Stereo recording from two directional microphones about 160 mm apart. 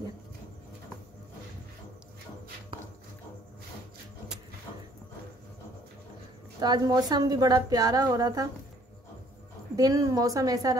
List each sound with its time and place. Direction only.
6.6 s a woman's voice: 25° right (ahead or behind)
9.8 s a woman's voice: 20° right (ahead or behind)